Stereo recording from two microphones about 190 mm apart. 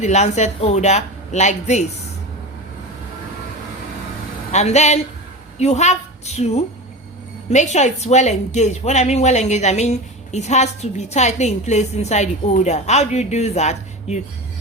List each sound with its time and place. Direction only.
0.0 s a woman's voice: 35° left (ahead or behind)
4.5 s a woman's voice: 35° left (ahead or behind)